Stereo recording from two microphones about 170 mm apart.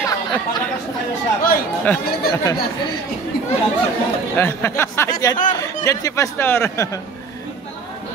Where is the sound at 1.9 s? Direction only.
15° left (ahead or behind).